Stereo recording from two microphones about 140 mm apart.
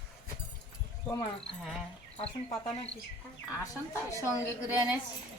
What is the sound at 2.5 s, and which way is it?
Speech, 45° left (ahead or behind).